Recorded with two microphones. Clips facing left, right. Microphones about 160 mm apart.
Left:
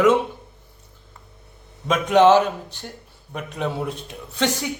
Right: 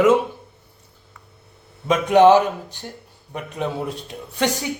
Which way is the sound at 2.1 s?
15° right (ahead or behind).